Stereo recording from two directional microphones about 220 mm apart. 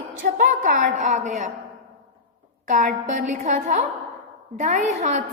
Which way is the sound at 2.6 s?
35° right (ahead or behind).